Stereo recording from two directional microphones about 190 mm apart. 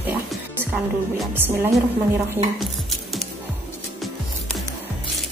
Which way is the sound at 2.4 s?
30° right (ahead or behind).